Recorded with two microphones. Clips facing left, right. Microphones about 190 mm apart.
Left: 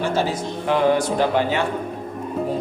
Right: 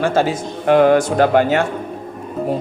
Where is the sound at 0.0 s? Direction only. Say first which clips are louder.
Right 5 dB; 50° right (ahead or behind).